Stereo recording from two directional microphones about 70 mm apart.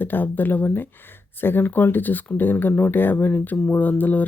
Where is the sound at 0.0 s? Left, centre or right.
Left.